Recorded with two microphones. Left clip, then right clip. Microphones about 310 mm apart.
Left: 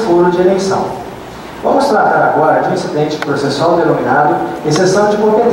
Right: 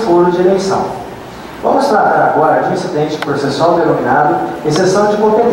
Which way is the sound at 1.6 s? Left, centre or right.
Centre.